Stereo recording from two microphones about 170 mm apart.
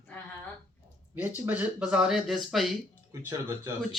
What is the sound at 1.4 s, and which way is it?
Speech, 5° right (ahead or behind).